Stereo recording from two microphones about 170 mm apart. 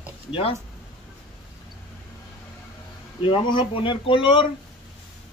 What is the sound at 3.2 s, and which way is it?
Speech, 30° left (ahead or behind).